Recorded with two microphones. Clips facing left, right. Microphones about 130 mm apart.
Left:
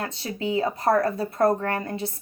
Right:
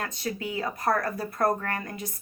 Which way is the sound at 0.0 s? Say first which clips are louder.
Left 3 dB; 30° left (ahead or behind).